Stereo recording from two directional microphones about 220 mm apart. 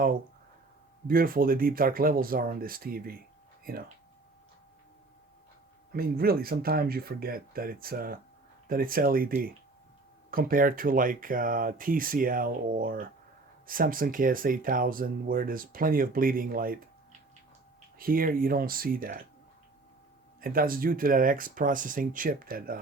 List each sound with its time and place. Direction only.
1.0 s speech: 40° right (ahead or behind)
5.9 s speech: 45° right (ahead or behind)
20.4 s speech: 40° right (ahead or behind)